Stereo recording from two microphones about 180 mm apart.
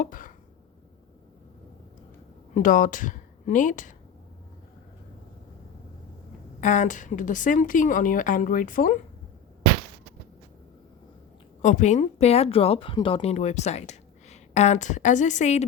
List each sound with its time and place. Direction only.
0.0 s a sound: 50° left (ahead or behind)
2.6 s a woman's voice: 45° left (ahead or behind)
6.6 s a woman's voice: 45° left (ahead or behind)
11.6 s speech: 45° left (ahead or behind)